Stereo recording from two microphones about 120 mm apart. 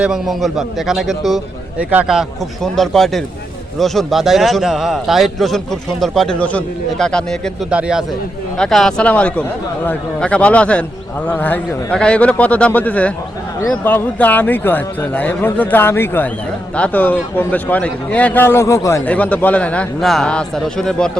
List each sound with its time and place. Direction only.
0.0 s a man's voice: 5° right (ahead or behind)
1.8 s speech: 15° right (ahead or behind)
2.7 s a man's voice: centre (ahead or behind)
7.7 s speech: 10° right (ahead or behind)
8.5 s speech: 5° left (ahead or behind); by 19.0 s 25° left (ahead or behind)
19.0 s speech: 10° left (ahead or behind)